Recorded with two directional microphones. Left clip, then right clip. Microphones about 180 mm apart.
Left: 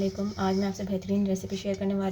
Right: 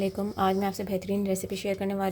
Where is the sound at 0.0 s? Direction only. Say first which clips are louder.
Right 3 dB; 40° right (ahead or behind).